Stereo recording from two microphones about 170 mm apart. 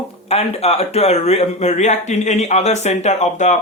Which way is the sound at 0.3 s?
40° left (ahead or behind).